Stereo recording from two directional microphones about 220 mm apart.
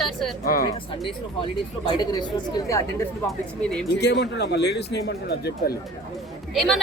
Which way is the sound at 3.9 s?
50° left (ahead or behind).